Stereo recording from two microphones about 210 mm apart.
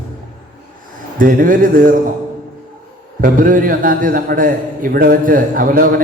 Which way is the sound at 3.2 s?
40° right (ahead or behind).